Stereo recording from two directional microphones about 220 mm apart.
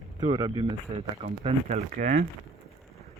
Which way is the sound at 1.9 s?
35° right (ahead or behind).